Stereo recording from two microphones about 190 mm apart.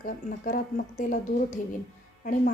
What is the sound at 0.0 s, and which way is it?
A woman's voice, 45° left (ahead or behind).